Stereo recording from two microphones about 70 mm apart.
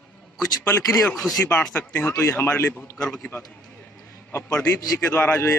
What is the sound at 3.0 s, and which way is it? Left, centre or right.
Speech, centre.